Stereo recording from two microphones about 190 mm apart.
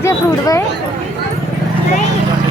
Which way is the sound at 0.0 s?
15° left (ahead or behind).